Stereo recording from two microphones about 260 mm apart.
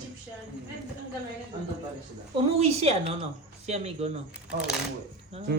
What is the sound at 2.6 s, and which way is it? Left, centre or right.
A woman's voice, right.